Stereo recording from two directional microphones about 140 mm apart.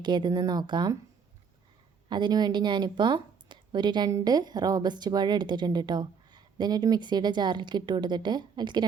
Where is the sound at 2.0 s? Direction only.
35° right (ahead or behind).